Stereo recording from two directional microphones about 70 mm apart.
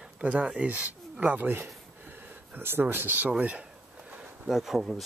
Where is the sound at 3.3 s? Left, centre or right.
Centre.